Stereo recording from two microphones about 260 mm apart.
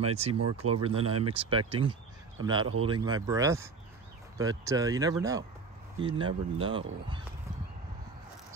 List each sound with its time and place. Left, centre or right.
0.0 s speech: right